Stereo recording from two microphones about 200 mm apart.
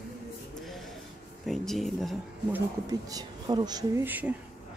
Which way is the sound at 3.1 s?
20° right (ahead or behind).